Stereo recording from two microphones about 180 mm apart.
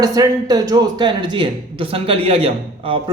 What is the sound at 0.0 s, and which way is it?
Speech, 20° right (ahead or behind).